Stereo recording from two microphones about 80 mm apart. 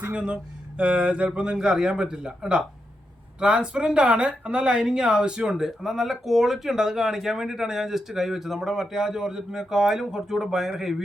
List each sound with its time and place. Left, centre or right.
0.0 s speech: centre